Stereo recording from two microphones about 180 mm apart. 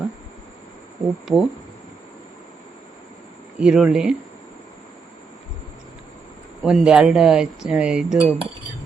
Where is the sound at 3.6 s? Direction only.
5° right (ahead or behind).